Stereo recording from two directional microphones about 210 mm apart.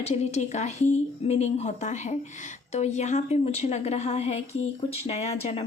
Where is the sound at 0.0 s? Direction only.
30° left (ahead or behind).